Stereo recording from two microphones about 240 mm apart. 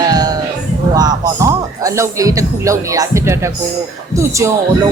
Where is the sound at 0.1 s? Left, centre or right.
Centre.